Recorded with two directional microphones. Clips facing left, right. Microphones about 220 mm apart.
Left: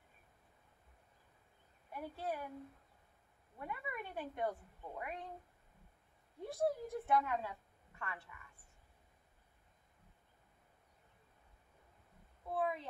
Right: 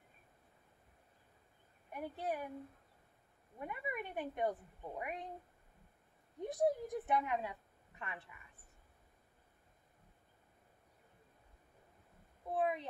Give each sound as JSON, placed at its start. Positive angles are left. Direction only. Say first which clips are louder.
{"t": 1.9, "sound": "speech", "louder": "right 2 dB", "side_deg": -20}
{"t": 3.5, "sound": "speech", "louder": "right 2 dB", "side_deg": -20}
{"t": 6.4, "sound": "a woman's voice", "louder": "right 3 dB", "side_deg": -20}
{"t": 12.4, "sound": "speech", "louder": "right 2 dB", "side_deg": -20}